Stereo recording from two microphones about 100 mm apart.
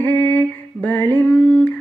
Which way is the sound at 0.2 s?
15° left (ahead or behind).